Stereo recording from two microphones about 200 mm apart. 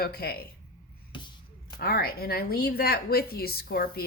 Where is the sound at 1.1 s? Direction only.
25° left (ahead or behind).